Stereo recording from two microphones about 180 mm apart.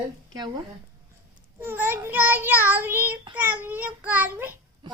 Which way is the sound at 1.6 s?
15° right (ahead or behind).